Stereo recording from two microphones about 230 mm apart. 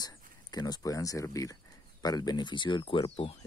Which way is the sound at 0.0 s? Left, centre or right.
Centre.